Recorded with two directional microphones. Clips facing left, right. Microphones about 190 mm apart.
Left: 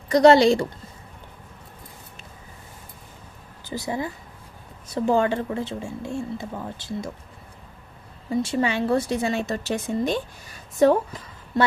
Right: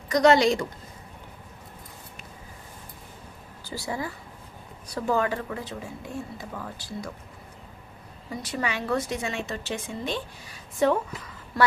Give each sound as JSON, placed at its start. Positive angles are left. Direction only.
{"t": 0.1, "sound": "a woman's voice", "side_deg": 30}
{"t": 3.6, "sound": "speech", "side_deg": 20}
{"t": 8.3, "sound": "a woman's voice", "side_deg": 25}
{"t": 11.6, "sound": "speech", "side_deg": 25}